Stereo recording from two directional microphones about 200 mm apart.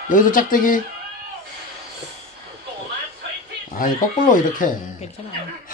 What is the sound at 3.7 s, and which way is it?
A woman's voice, 40° left (ahead or behind).